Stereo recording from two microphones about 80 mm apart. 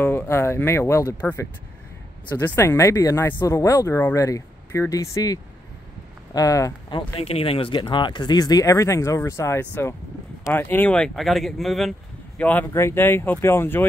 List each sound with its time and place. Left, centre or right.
0.0 s speech: left
2.3 s speech: left
6.9 s speech: left
11.1 s speech: centre
12.4 s speech: centre
12.7 s speech: left